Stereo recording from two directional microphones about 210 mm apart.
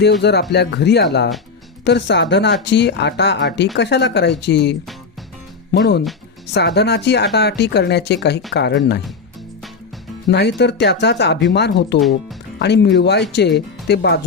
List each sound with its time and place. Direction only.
0.0 s speech: 55° left (ahead or behind)
10.2 s speech: 55° left (ahead or behind)